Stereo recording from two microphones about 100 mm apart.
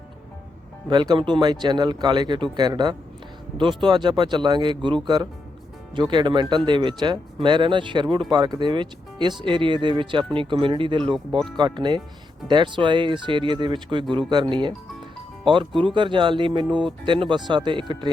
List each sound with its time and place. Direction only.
0.9 s speech: 45° right (ahead or behind)